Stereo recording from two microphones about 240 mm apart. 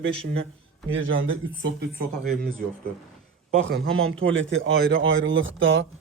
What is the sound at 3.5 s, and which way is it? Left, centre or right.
Speech, right.